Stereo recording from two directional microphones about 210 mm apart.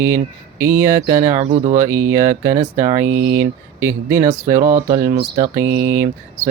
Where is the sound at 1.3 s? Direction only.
25° right (ahead or behind).